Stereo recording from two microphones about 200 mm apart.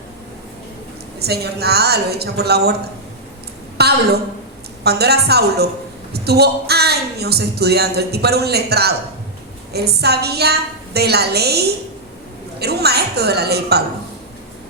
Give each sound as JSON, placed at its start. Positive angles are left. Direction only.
{"t": 1.2, "sound": "a woman's voice", "side_deg": -55}
{"t": 3.8, "sound": "a woman's voice", "side_deg": -55}